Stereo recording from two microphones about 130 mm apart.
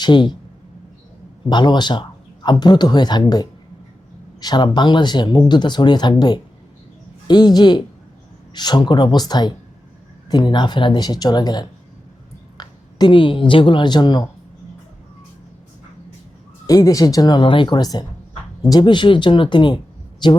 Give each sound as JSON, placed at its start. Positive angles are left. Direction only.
{"t": 0.0, "sound": "speech", "side_deg": 35}
{"t": 1.5, "sound": "speech", "side_deg": 35}
{"t": 16.6, "sound": "speech", "side_deg": 25}